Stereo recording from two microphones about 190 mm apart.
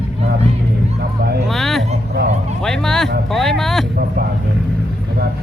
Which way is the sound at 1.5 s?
Centre (ahead or behind).